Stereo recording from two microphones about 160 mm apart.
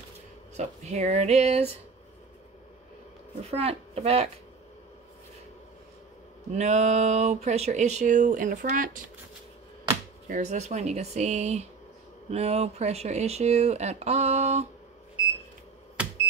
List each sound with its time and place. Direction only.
0.6 s speech: 45° right (ahead or behind)
3.4 s a woman's voice: 35° right (ahead or behind)
6.5 s speech: 45° right (ahead or behind)
10.2 s speech: 50° right (ahead or behind)